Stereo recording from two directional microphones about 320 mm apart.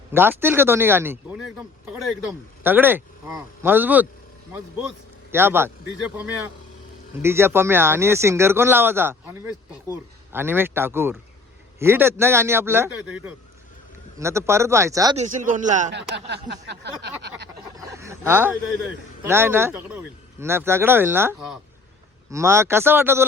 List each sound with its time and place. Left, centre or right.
0.1 s a man's voice: centre
5.3 s speech: centre
7.2 s speech: centre
14.2 s a man's voice: centre; by 17.5 s right
17.7 s a sound: centre
19.2 s speech: centre